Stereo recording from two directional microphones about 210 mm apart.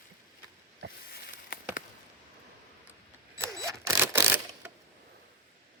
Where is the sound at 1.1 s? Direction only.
45° left (ahead or behind).